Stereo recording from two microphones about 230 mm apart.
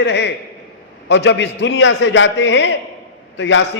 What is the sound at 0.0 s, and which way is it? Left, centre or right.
A man's voice, left.